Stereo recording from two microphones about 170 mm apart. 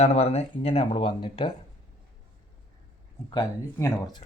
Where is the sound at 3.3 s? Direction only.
20° left (ahead or behind).